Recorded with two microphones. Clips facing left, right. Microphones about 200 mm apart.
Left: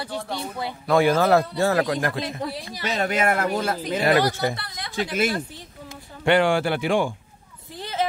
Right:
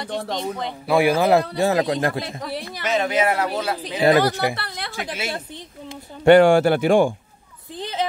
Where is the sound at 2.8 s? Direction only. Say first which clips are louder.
Right 2 dB; 45° left (ahead or behind).